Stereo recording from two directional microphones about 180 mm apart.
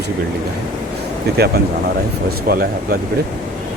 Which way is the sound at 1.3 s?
60° right (ahead or behind).